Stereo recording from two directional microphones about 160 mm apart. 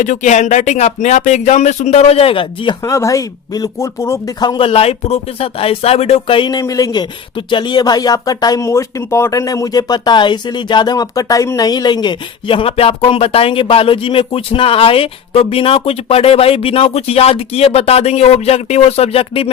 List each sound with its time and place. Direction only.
0.0 s speech: 50° left (ahead or behind); by 2.7 s 35° left (ahead or behind)
2.8 s speech: 20° left (ahead or behind); by 19.5 s 35° left (ahead or behind)